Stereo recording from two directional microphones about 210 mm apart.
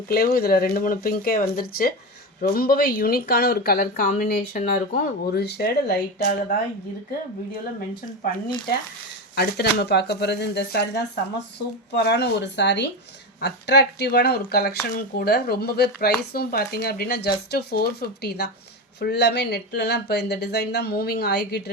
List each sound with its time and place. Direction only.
0.1 s speech: 45° left (ahead or behind)
9.3 s speech: 50° left (ahead or behind)